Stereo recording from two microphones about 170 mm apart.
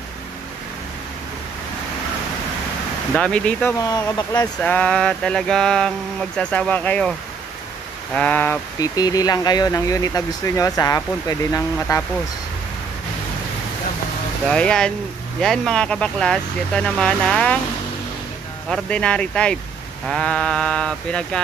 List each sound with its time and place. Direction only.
3.2 s speech: 5° left (ahead or behind)
3.8 s speech: 25° left (ahead or behind)
4.6 s speech: 5° left (ahead or behind)
8.7 s speech: 20° left (ahead or behind)
14.5 s speech: 5° left (ahead or behind)
18.7 s speech: 5° left (ahead or behind)